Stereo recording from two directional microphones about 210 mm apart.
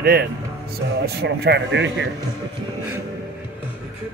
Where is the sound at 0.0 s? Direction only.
50° right (ahead or behind).